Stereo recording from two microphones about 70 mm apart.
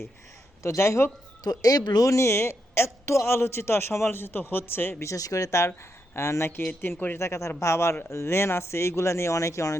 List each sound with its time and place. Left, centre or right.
0.6 s a man's voice: left
1.5 s speech: left
2.0 s a man's voice: left
5.0 s a man's voice: left